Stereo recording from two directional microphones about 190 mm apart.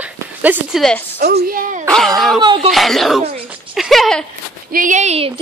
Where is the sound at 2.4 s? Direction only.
25° right (ahead or behind).